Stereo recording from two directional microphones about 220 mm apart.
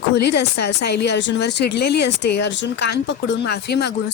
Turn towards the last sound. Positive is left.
turn(degrees=50)  # may be behind; listen again after turning